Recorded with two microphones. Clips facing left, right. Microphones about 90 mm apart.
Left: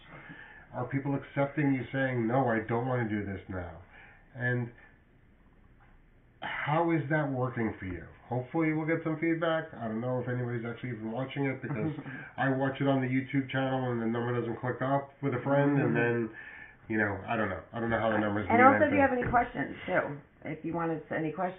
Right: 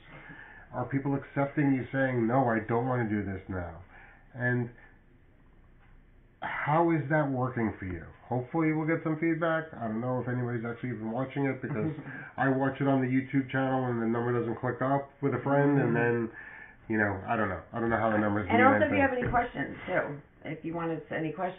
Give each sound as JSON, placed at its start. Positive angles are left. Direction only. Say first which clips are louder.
{"t": 0.7, "sound": "speech", "louder": "right 2 dB", "side_deg": 0}
{"t": 6.4, "sound": "speech", "louder": "right 3 dB", "side_deg": -15}
{"t": 7.1, "sound": "speech", "louder": "right 2 dB", "side_deg": 0}
{"t": 11.1, "sound": "speech", "louder": "right 2 dB", "side_deg": -20}
{"t": 11.4, "sound": "a man's voice", "louder": "right 2 dB", "side_deg": -5}
{"t": 18.5, "sound": "speech", "louder": "left 2 dB", "side_deg": 0}